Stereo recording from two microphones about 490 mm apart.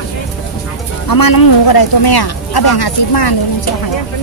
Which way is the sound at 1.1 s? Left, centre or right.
Left.